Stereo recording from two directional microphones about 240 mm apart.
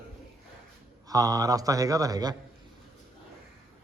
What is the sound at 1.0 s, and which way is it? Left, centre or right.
A man's voice, centre.